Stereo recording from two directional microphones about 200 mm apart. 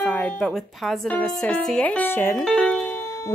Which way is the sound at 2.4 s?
Centre (ahead or behind).